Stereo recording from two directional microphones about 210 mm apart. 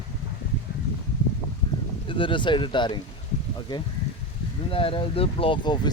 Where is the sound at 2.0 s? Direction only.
25° left (ahead or behind).